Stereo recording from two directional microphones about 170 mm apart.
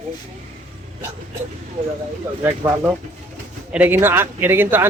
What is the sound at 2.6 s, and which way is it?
Speech, 15° right (ahead or behind).